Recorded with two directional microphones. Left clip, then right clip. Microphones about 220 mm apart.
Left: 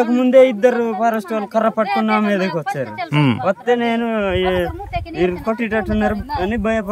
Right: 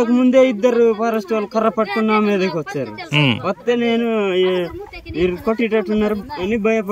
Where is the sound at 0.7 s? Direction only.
55° left (ahead or behind).